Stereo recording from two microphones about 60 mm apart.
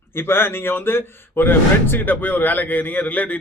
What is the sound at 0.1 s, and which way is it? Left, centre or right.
Speech, left.